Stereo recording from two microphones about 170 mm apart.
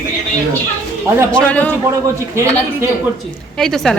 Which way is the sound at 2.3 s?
15° right (ahead or behind).